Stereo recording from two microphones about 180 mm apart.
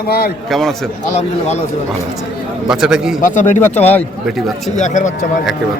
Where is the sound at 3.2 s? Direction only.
45° left (ahead or behind).